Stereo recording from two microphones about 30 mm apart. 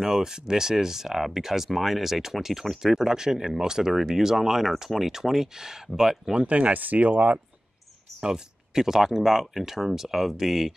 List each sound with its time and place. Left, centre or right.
0.0 s speech: centre
6.4 s speech: right
8.2 s speech: centre